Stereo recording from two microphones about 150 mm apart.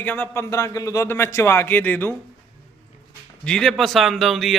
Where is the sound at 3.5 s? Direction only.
5° left (ahead or behind).